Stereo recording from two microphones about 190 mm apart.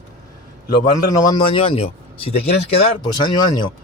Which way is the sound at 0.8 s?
25° left (ahead or behind).